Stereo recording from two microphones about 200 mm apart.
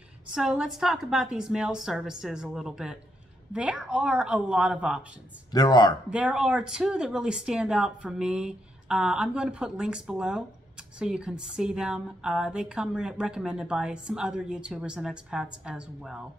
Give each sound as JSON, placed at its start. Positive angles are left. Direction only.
{"t": 0.3, "sound": "a woman's voice", "side_deg": -5}
{"t": 5.5, "sound": "speech", "side_deg": 20}
{"t": 6.0, "sound": "a woman's voice", "side_deg": -5}